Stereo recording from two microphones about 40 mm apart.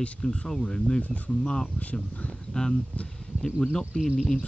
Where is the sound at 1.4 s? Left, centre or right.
Centre.